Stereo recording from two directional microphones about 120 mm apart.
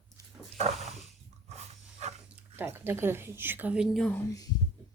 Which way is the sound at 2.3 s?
15° right (ahead or behind).